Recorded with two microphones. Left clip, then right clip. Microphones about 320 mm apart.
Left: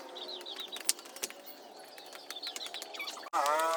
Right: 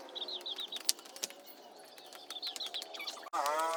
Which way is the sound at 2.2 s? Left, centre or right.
Centre.